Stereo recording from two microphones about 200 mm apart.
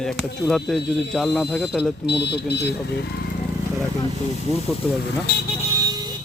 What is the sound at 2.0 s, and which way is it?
Speech, 60° left (ahead or behind).